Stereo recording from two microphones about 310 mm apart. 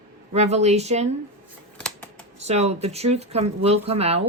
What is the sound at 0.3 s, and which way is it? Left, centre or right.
Speech, right.